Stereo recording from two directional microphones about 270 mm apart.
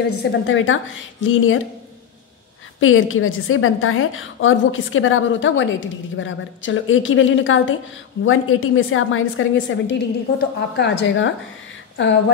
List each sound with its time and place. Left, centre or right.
0.2 s a woman's voice: left
2.8 s a woman's voice: left